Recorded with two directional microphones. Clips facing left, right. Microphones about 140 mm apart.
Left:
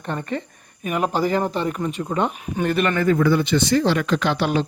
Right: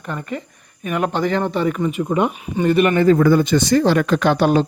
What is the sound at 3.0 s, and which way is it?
Speech, 45° right (ahead or behind).